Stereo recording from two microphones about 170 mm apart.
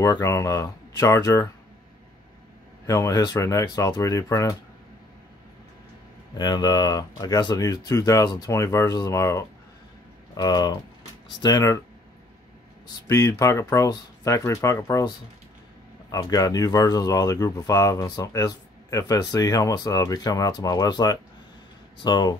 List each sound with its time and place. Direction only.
0.0 s speech: 20° left (ahead or behind)
2.9 s speech: 20° left (ahead or behind)
6.3 s speech: 25° left (ahead or behind)
12.8 s speech: 20° left (ahead or behind)